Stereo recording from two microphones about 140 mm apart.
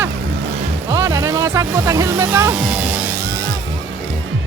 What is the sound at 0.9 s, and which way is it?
Music, 20° right (ahead or behind).